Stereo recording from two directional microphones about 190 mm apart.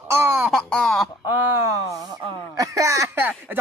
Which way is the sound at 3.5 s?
10° right (ahead or behind).